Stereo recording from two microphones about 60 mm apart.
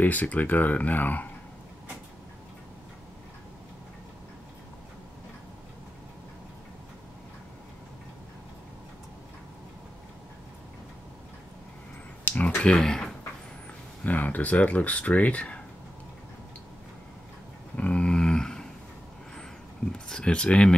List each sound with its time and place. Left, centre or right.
0.0 s speech: left
12.3 s clicking: left
14.0 s speech: left
17.7 s a sound: left
20.1 s speech: centre